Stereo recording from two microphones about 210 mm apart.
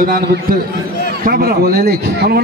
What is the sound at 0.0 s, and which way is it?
A man's voice, 45° right (ahead or behind).